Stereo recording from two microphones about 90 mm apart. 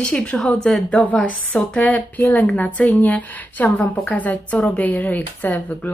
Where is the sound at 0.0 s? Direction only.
10° left (ahead or behind).